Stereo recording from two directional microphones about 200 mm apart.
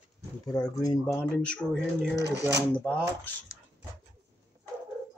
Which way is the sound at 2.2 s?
60° right (ahead or behind).